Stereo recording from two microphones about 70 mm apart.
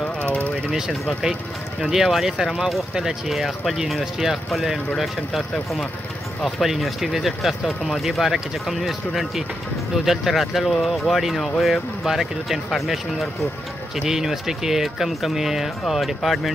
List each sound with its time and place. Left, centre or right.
0.0 s vehicle: centre
1.8 s speech: centre